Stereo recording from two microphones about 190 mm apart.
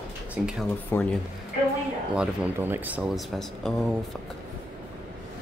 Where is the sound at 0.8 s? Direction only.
10° left (ahead or behind).